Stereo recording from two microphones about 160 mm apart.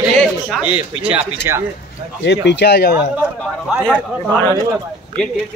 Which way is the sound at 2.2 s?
90° left.